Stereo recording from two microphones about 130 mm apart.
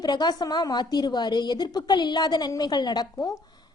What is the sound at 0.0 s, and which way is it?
A woman's voice, 35° left (ahead or behind).